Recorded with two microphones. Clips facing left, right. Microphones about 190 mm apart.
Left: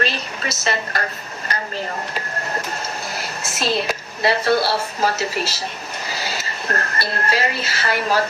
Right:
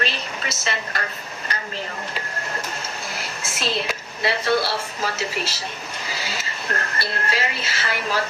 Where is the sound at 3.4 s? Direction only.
40° left (ahead or behind).